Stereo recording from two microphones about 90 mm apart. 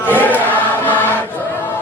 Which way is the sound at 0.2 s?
20° left (ahead or behind).